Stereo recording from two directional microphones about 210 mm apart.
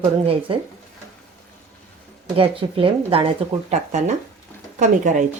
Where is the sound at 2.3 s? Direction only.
25° right (ahead or behind).